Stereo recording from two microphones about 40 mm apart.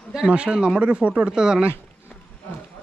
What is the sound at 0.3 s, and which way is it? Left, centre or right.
Speech, right.